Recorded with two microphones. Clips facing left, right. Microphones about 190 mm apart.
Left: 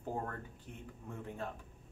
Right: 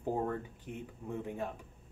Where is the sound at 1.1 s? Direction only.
15° right (ahead or behind).